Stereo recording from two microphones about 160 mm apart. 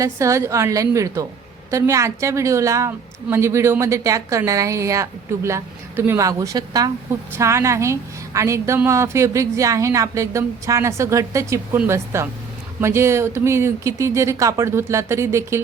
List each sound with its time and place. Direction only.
0.0 s a woman's voice: 20° right (ahead or behind)